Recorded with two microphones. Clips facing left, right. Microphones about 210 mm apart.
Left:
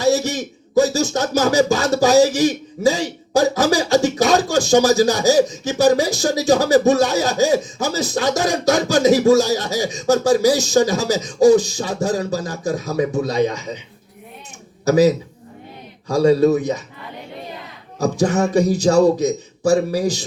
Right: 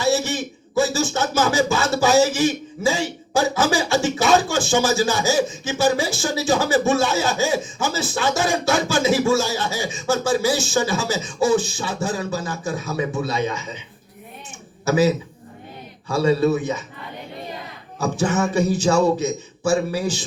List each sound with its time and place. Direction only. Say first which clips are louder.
0.0 s speech: left 3 dB; 40° left (ahead or behind)
14.8 s a man's voice: left 4 dB; 40° left (ahead or behind)
18.0 s speech: left 3 dB; 40° left (ahead or behind)